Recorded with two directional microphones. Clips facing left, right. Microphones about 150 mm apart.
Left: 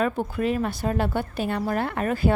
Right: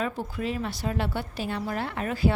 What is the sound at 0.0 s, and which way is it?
A woman's voice, 55° left (ahead or behind).